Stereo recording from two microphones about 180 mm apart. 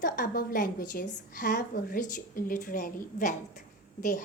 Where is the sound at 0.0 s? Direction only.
50° left (ahead or behind).